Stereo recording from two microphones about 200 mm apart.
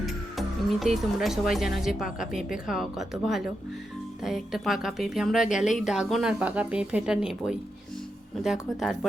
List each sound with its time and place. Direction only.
0.0 s a woman's voice: centre (ahead or behind)